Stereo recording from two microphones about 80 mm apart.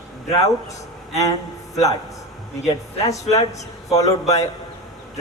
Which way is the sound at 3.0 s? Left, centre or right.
Left.